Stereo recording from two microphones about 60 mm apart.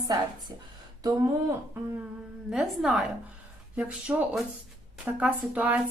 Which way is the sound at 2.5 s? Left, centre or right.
Centre.